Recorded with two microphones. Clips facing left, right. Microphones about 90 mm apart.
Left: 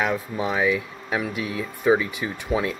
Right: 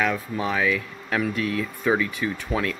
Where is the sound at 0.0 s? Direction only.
20° left (ahead or behind).